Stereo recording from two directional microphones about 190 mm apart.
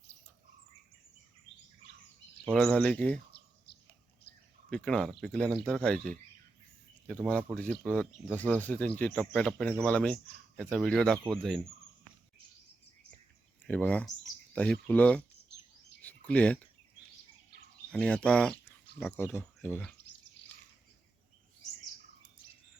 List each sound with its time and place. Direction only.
2.4 s speech: 5° left (ahead or behind)
3.7 s bird: 60° left (ahead or behind)
4.7 s speech: 5° left (ahead or behind)
7.5 s speech: 5° left (ahead or behind)
13.7 s speech: 5° left (ahead or behind)
16.0 s a sound: 10° left (ahead or behind)
17.9 s speech: 5° left (ahead or behind)